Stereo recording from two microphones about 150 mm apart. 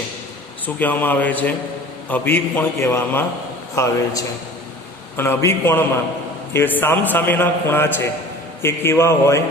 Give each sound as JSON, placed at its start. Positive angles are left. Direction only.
{"t": 0.8, "sound": "a man's voice", "side_deg": 10}